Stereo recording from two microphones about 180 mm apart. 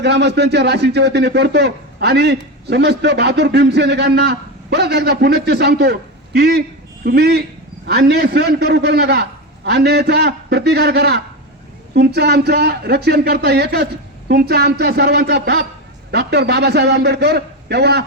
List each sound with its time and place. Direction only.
0.0 s speech: 70° right (ahead or behind)